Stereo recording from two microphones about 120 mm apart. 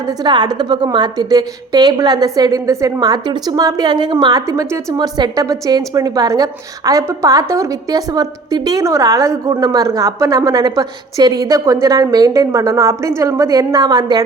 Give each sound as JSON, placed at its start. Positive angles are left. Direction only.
{"t": 0.2, "sound": "a woman's voice", "side_deg": -35}